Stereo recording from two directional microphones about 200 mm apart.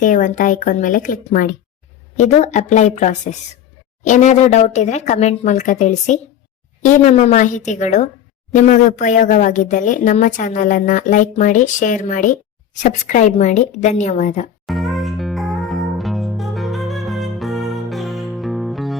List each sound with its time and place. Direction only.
0.0 s speech: 40° left (ahead or behind)
14.7 s music: centre (ahead or behind)